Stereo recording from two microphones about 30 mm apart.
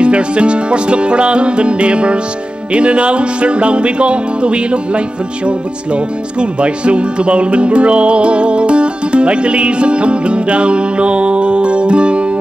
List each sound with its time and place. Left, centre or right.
0.0 s music: right
6.4 s music: right